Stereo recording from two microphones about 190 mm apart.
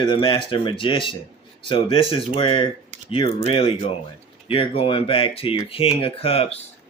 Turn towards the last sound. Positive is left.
turn(degrees=30)  # may be behind; listen again after turning